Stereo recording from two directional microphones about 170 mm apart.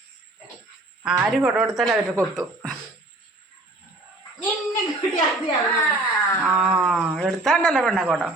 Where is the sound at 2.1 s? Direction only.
20° right (ahead or behind).